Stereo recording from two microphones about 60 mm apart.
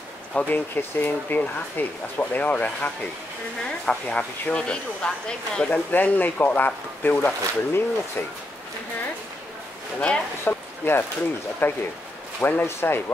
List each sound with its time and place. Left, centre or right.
0.3 s speech: left
0.7 s speech: left
3.8 s speech: centre
5.7 s speech: left
9.9 s speech: centre
10.4 s a sound: left
11.6 s speech: left